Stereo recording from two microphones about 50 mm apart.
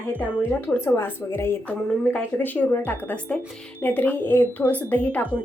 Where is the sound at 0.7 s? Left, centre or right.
Left.